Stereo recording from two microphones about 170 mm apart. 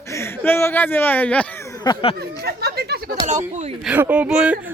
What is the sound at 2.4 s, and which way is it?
Speech, 70° right (ahead or behind).